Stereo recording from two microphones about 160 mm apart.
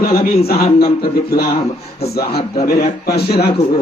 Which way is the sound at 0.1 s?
70° left (ahead or behind).